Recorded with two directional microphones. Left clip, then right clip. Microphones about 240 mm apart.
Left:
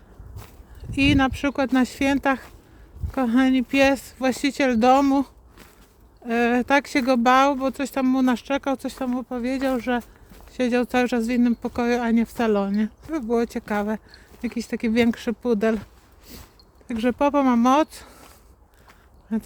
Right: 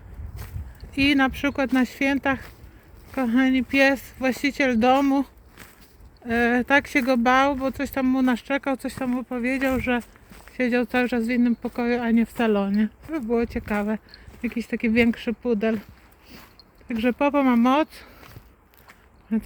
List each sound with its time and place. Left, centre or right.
0.8 s speech: centre
16.9 s speech: centre